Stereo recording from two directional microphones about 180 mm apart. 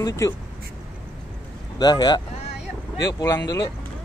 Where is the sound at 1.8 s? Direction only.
20° left (ahead or behind).